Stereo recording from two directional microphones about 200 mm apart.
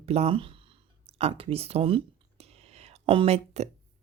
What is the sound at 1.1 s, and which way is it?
Whispering, 30° right (ahead or behind).